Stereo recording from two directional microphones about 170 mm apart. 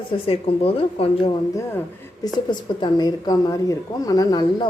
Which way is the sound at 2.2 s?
25° left (ahead or behind).